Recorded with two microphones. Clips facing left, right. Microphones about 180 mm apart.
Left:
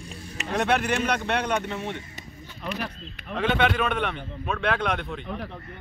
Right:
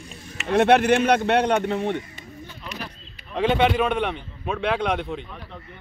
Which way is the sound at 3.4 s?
10° right (ahead or behind).